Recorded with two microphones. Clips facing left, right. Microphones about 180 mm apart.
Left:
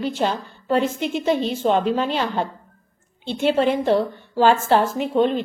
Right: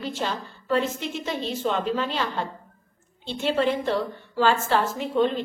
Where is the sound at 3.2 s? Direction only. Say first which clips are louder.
Left 5 dB; 60° left (ahead or behind).